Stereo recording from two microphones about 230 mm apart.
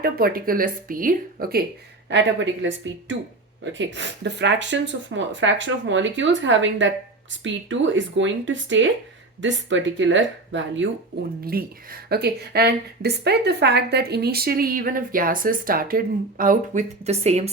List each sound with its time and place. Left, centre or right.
0.0 s speech: right
2.0 s speech: right
11.4 s speech: right